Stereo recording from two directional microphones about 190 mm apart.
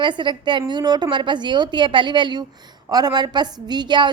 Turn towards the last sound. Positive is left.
turn(degrees=-25)  # may be behind; listen again after turning